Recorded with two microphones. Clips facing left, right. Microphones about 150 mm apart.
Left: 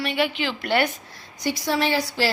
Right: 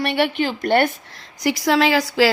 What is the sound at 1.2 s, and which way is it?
Speech, 90° right.